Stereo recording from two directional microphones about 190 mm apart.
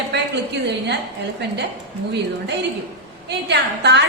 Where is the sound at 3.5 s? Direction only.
65° right (ahead or behind).